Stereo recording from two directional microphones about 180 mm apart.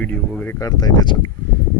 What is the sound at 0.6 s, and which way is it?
Speech, 20° left (ahead or behind).